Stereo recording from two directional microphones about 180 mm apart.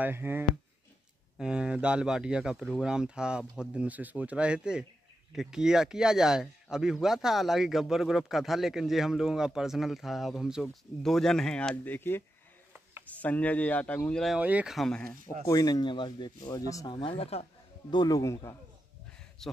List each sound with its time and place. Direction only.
0.0 s speech: 10° right (ahead or behind); by 15.1 s 5° left (ahead or behind)
15.4 s speech: 20° left (ahead or behind)
17.9 s speech: 20° left (ahead or behind)
19.4 s speech: centre (ahead or behind)